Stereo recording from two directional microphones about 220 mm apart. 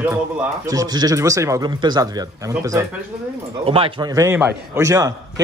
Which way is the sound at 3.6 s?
25° right (ahead or behind).